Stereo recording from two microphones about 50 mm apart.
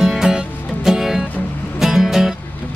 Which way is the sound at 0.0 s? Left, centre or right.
Centre.